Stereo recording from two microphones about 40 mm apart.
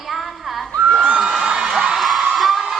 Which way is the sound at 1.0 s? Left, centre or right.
Right.